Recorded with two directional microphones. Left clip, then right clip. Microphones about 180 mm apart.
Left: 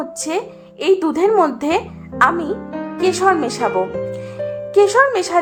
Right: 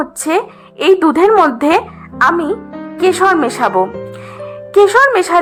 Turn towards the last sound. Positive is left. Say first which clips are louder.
# right 5 dB
turn(degrees=-20)  # may be behind; listen again after turning